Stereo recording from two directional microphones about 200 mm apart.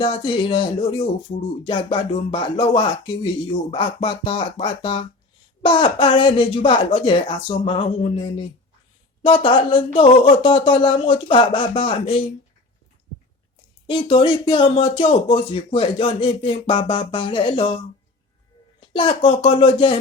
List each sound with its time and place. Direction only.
0.0 s speech: 25° left (ahead or behind)
13.9 s speech: 25° left (ahead or behind)
18.9 s speech: 25° left (ahead or behind)